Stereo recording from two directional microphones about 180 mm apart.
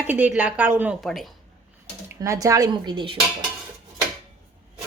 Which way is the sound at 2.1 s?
20° right (ahead or behind).